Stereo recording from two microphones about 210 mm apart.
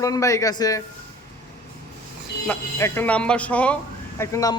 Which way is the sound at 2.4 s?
10° left (ahead or behind).